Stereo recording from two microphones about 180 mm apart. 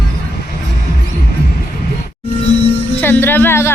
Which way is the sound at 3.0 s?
10° left (ahead or behind).